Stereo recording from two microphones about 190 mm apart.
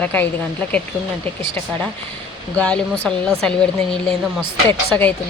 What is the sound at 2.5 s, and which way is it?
Speech, 5° left (ahead or behind).